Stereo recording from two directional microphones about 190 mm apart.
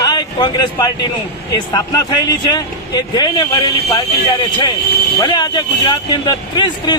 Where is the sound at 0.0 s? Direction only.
20° left (ahead or behind).